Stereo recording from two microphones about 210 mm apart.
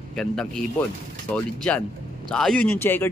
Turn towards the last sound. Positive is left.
turn(degrees=10)  # may be behind; listen again after turning